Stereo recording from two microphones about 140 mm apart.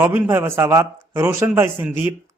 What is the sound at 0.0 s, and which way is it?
Speech, 15° right (ahead or behind).